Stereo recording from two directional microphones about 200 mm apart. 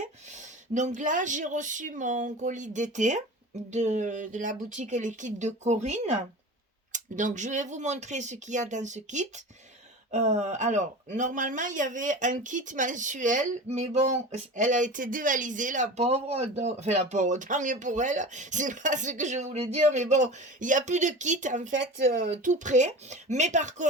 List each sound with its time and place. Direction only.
0.7 s speech: 35° right (ahead or behind)